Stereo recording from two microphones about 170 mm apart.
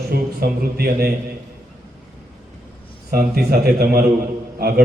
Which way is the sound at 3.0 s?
65° right (ahead or behind).